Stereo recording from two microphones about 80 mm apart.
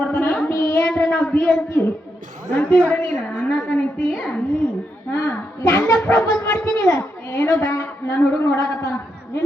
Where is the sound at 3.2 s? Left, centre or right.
Left.